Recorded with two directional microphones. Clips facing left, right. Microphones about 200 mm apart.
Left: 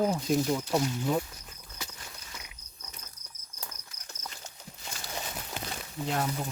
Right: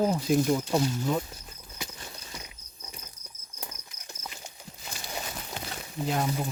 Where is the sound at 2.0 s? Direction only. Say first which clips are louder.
Right 4 dB; 30° right (ahead or behind).